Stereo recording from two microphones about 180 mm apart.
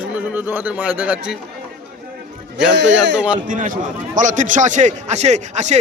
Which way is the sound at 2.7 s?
80° right.